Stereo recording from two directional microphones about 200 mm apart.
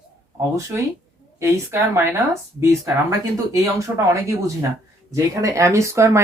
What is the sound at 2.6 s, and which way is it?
Speech, 15° right (ahead or behind).